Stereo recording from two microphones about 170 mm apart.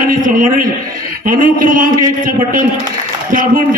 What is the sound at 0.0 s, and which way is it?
A man's voice, 55° right (ahead or behind).